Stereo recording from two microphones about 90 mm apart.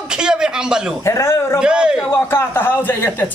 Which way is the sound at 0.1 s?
10° right (ahead or behind).